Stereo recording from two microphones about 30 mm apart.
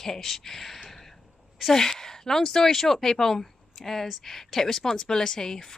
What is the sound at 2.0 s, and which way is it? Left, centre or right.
Speech, centre.